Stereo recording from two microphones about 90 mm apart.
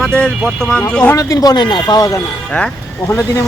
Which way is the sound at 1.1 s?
40° left (ahead or behind).